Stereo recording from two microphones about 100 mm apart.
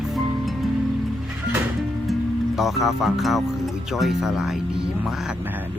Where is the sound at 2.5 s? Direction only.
Centre (ahead or behind).